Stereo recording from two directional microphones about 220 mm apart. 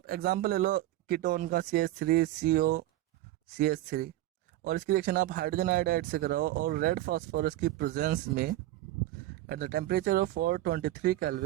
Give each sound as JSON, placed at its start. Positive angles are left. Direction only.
{"t": 0.0, "sound": "speech", "side_deg": -45}